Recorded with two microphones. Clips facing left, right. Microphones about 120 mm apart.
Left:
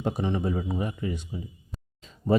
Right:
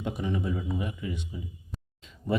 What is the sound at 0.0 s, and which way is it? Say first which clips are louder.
Speech: left 3 dB; 35° left (ahead or behind).